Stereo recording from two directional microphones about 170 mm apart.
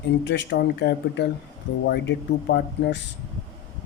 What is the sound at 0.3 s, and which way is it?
Speech, 90° left.